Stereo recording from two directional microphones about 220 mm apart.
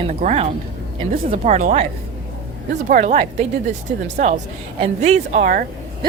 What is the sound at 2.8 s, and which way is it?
Speech, 35° right (ahead or behind).